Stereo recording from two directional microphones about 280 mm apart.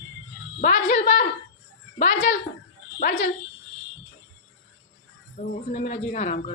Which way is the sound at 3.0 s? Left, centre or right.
Left.